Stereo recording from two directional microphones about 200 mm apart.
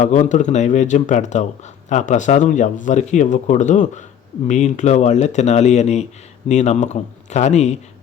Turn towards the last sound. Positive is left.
turn(degrees=35)  # may be behind; listen again after turning